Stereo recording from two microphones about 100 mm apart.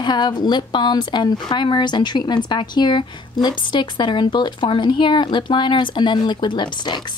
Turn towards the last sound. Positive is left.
turn(degrees=50)  # may be behind; listen again after turning